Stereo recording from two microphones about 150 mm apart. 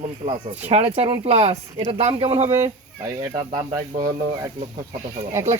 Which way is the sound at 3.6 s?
20° right (ahead or behind).